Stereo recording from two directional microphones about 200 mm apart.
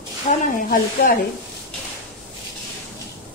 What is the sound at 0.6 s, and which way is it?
Speech, 45° left (ahead or behind).